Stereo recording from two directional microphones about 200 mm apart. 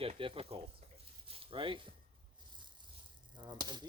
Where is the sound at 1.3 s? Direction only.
25° right (ahead or behind).